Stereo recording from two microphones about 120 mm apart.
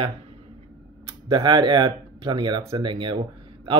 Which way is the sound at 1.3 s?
40° right (ahead or behind).